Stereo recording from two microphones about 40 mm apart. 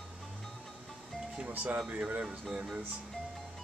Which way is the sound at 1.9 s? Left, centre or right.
Right.